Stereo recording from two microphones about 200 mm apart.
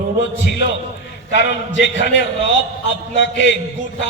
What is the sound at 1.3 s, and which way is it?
Speech, 65° left (ahead or behind).